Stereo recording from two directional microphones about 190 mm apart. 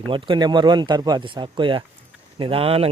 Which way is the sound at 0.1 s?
25° right (ahead or behind).